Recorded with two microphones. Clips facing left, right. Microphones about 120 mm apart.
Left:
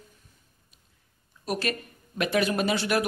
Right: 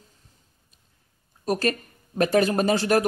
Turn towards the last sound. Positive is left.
turn(degrees=-40)  # may be behind; listen again after turning